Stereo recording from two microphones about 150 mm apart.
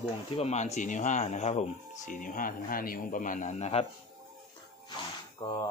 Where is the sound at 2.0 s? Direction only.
65° left (ahead or behind); by 3.8 s 45° left (ahead or behind).